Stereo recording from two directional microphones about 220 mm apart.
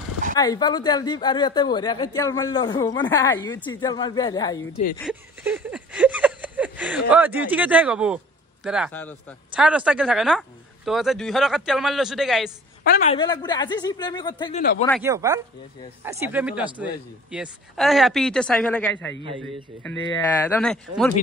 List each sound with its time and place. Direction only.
0.4 s a woman's voice: 20° left (ahead or behind)
5.0 s a sound: 5° right (ahead or behind)
8.6 s a man's voice: 5° right (ahead or behind)
13.0 s a woman's voice: 25° left (ahead or behind)
15.0 s a man's voice: 15° right (ahead or behind); by 21.1 s 5° left (ahead or behind)